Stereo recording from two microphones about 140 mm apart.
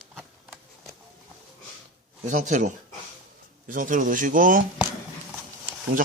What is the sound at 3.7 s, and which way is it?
Speech, 70° right (ahead or behind).